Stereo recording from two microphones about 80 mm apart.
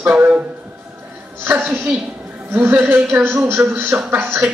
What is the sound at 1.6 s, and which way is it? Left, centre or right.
Speech, centre.